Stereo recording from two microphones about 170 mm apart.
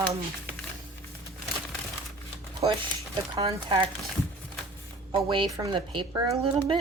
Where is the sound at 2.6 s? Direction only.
30° right (ahead or behind).